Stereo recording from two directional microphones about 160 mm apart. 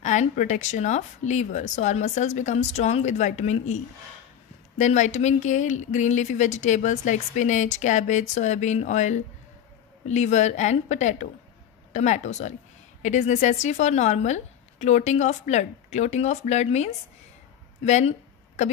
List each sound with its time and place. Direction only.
0.0 s speech: 50° left (ahead or behind)
4.7 s speech: 50° left (ahead or behind)